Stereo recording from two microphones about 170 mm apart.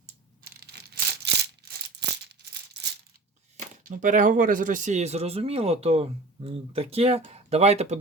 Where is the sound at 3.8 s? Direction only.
50° right (ahead or behind).